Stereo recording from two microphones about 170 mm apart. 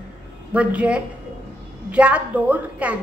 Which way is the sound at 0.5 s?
10° right (ahead or behind).